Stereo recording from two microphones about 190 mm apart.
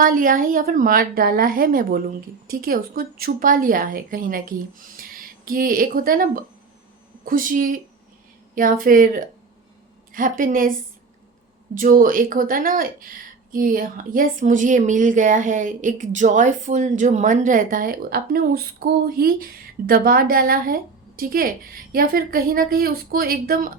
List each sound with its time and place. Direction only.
0.0 s speech: 45° right (ahead or behind)